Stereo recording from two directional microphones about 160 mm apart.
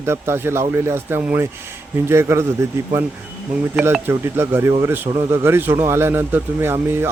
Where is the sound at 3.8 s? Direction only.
15° right (ahead or behind).